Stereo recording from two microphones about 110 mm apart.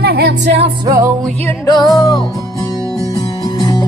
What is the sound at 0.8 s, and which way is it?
Music, 25° right (ahead or behind).